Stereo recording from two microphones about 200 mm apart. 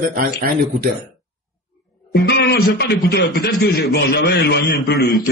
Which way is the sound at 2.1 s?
55° left (ahead or behind).